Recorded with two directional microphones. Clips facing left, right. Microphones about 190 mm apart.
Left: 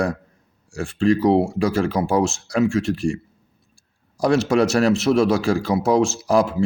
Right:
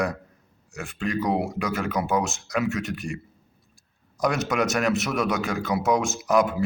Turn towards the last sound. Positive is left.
turn(degrees=30)  # may be behind; listen again after turning